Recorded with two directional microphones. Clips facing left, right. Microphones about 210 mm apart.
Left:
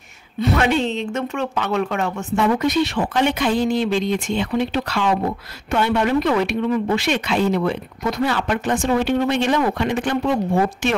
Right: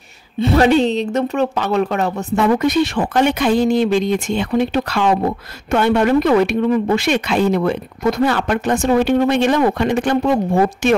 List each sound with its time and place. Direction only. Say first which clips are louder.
0.4 s speech: right 6 dB; 35° right (ahead or behind)
2.4 s speech: right 3 dB; 50° right (ahead or behind)